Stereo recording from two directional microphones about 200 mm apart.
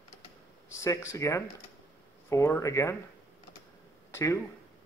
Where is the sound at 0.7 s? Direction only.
15° left (ahead or behind).